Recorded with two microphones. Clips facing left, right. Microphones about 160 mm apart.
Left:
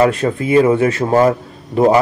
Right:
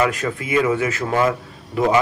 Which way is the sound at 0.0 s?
30° left (ahead or behind).